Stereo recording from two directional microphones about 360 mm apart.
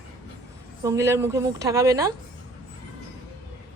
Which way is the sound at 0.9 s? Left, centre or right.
Centre.